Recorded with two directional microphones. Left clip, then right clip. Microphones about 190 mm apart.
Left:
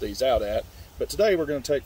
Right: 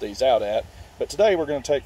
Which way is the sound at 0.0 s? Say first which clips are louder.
Right 3 dB; 25° left (ahead or behind).